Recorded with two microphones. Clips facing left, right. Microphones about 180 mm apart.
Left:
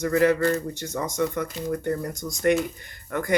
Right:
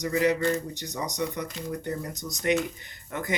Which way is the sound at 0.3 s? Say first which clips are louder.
Left 3 dB; 15° right (ahead or behind).